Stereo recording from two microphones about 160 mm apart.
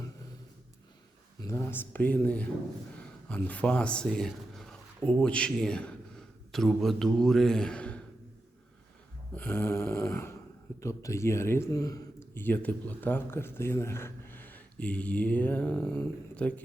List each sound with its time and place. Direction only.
1.4 s speech: 15° left (ahead or behind)
9.3 s snoring: 10° left (ahead or behind)
10.8 s speech: 20° left (ahead or behind)